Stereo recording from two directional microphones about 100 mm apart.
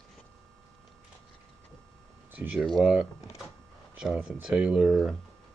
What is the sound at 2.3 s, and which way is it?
Speech, 20° right (ahead or behind).